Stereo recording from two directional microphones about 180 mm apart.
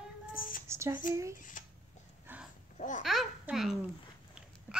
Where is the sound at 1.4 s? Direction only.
45° left (ahead or behind).